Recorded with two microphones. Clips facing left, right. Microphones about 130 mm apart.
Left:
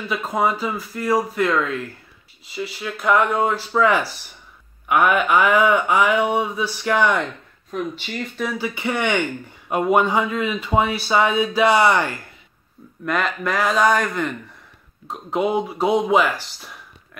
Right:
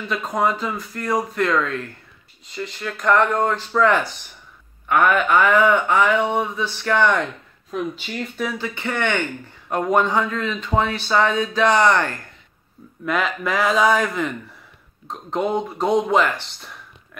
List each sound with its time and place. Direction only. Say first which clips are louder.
0.1 s a man's voice: even; 5° left (ahead or behind)
8.5 s a man's voice: left 2 dB; 10° left (ahead or behind)